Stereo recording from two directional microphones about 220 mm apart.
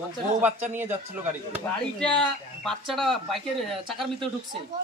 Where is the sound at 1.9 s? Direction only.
5° left (ahead or behind).